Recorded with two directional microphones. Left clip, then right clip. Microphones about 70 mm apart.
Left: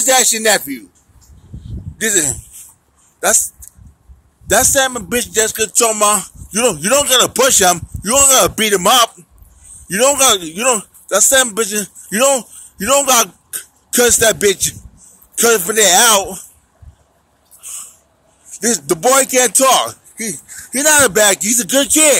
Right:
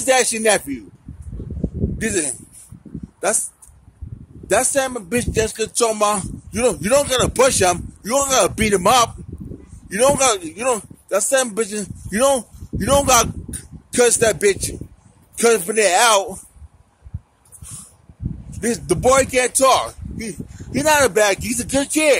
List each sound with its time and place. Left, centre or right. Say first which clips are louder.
0.0 s speech: left 3 dB; right
2.0 s speech: left 7 dB; right
4.5 s speech: left 5 dB; centre
10.4 s a man's voice: left 5 dB; centre; by 13.7 s right
13.8 s a man's voice: left 3 dB; centre
18.5 s a man's voice: left 4 dB; centre